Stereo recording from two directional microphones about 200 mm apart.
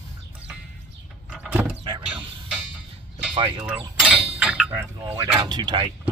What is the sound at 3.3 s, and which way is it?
Speech, 25° right (ahead or behind).